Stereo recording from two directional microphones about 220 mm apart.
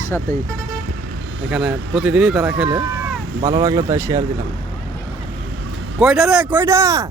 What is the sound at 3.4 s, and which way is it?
Speech, 15° right (ahead or behind).